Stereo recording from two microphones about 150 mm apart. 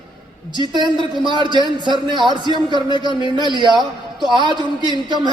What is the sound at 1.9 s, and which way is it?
Speech, 30° right (ahead or behind).